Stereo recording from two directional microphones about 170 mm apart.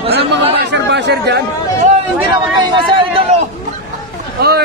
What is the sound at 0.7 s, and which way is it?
Chatter, 85° right.